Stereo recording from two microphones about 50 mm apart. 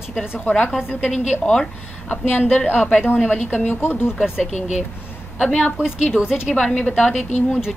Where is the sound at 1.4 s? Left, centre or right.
Centre.